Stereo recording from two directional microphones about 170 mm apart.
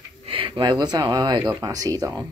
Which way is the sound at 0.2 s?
30° right (ahead or behind).